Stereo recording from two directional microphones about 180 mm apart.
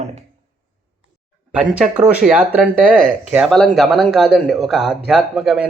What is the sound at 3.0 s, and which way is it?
Speech, 45° right (ahead or behind).